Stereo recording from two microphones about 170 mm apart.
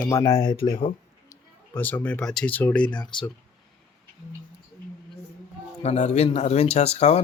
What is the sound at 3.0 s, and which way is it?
Speech, 30° left (ahead or behind).